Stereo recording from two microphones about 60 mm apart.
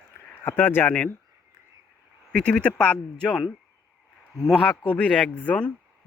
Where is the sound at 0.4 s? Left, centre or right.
Left.